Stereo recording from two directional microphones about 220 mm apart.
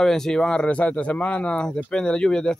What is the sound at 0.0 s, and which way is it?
Speech, centre (ahead or behind).